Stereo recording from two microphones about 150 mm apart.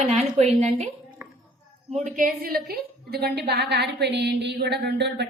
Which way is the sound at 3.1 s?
90° right.